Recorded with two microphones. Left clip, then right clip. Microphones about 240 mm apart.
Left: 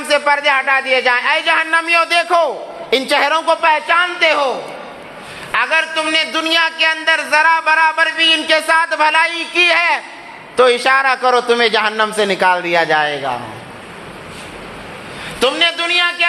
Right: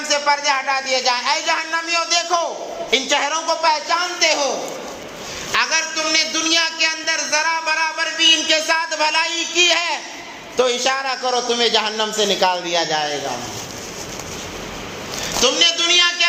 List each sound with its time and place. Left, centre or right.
0.1 s a man's voice: left
5.5 s a man's voice: left
15.4 s a man's voice: left